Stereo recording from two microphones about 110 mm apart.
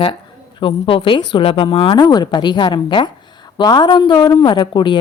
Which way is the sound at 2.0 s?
40° left (ahead or behind).